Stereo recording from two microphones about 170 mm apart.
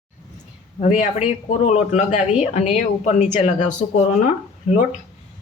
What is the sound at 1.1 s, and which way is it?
Speech, 40° left (ahead or behind).